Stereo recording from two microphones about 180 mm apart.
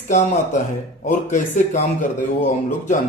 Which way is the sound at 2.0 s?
50° left (ahead or behind).